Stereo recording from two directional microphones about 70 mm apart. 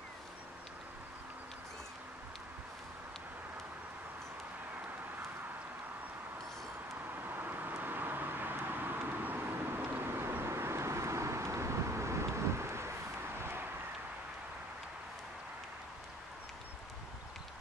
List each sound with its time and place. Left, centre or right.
7.2 s vehicle: right